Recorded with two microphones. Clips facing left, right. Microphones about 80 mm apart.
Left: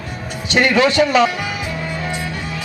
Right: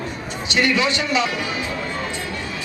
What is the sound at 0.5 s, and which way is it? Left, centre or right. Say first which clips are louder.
Speech: left 6 dB; left.